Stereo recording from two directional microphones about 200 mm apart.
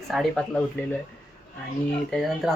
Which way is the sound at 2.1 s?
Centre (ahead or behind).